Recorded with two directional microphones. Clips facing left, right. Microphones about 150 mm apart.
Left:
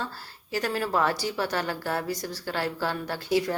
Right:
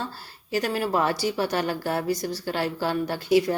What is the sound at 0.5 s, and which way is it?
A woman's voice, 15° right (ahead or behind).